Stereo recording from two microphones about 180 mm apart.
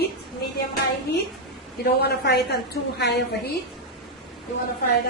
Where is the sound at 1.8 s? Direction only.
65° left (ahead or behind).